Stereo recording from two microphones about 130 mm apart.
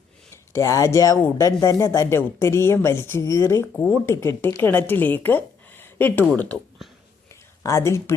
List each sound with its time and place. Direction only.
0.5 s a woman's voice: 25° left (ahead or behind)
7.6 s a woman's voice: 25° left (ahead or behind)